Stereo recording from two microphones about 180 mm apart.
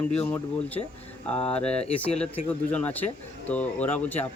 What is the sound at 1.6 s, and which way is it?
Speech, 35° left (ahead or behind).